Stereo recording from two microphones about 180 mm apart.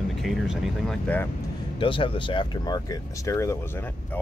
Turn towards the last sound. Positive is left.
turn(degrees=15)  # may be behind; listen again after turning